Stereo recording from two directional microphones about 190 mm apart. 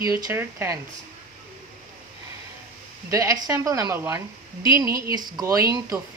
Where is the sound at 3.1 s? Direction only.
15° right (ahead or behind).